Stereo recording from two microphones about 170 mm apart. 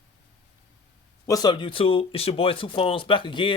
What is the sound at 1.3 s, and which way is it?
Speech, 25° left (ahead or behind).